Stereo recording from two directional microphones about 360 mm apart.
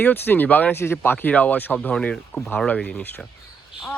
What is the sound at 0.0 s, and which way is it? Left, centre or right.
Speech, centre.